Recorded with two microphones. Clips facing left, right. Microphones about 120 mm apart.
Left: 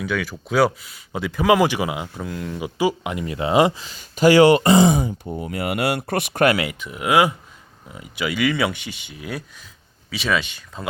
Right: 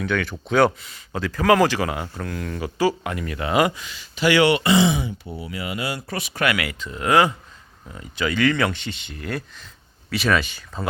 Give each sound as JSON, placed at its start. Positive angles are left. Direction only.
{"t": 0.0, "sound": "speech", "side_deg": 5}
{"t": 5.4, "sound": "speech", "side_deg": 50}
{"t": 6.6, "sound": "speech", "side_deg": 15}